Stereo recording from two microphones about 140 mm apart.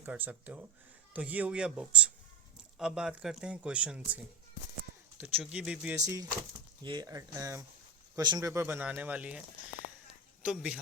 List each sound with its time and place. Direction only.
0.0 s speech: 10° right (ahead or behind)
5.2 s speech: 5° right (ahead or behind)
6.8 s speech: 30° right (ahead or behind); by 9.4 s 10° right (ahead or behind)
10.4 s speech: 5° right (ahead or behind)